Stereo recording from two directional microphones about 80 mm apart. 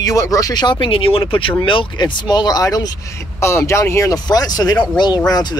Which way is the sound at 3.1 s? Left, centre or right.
Left.